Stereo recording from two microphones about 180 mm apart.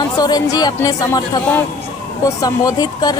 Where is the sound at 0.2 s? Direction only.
20° left (ahead or behind).